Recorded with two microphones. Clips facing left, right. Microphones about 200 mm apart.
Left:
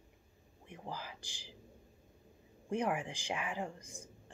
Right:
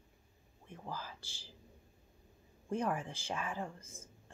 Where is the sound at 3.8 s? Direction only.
15° left (ahead or behind).